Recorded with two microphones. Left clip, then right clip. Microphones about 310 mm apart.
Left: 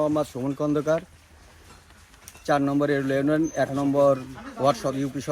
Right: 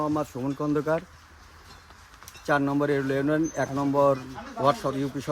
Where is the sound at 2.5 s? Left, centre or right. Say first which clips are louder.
Left 2 dB; centre.